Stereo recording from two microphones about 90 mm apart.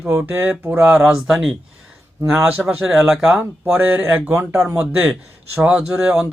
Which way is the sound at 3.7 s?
20° right (ahead or behind).